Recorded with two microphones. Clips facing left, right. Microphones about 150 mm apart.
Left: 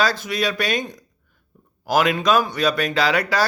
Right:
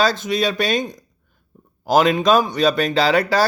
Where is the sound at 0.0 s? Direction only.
25° right (ahead or behind).